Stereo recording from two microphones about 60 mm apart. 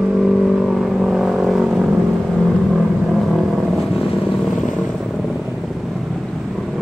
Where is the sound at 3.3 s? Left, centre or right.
Centre.